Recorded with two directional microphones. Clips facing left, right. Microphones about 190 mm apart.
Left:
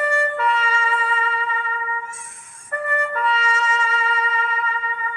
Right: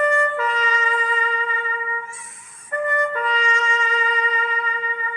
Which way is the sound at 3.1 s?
35° right (ahead or behind).